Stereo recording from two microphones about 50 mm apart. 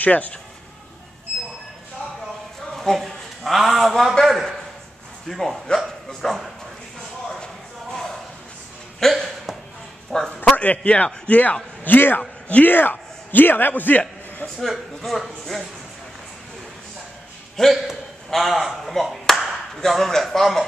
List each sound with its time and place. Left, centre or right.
0.0 s a man's voice: left
2.7 s a man's voice: centre
9.0 s a sound: centre
10.4 s a man's voice: left
11.8 s a man's voice: left
12.2 s speech: left
12.6 s a man's voice: left
15.0 s a man's voice: centre
17.6 s a man's voice: centre